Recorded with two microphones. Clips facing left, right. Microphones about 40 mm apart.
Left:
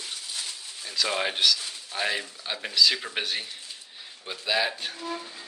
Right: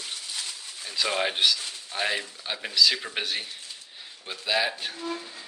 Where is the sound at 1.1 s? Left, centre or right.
Centre.